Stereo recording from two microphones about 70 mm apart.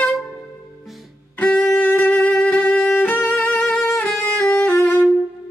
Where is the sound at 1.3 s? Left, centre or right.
Left.